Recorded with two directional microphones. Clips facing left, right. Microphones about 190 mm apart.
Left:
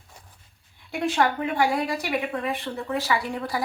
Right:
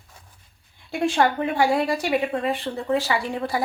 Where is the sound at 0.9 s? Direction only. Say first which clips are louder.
Right 3 dB; 30° right (ahead or behind).